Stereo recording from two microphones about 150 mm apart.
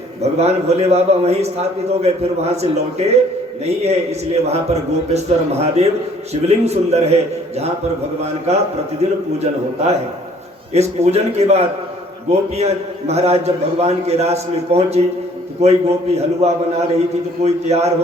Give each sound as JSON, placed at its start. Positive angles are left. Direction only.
{"t": 0.2, "sound": "a man's voice", "side_deg": -45}
{"t": 8.5, "sound": "a man's voice", "side_deg": -45}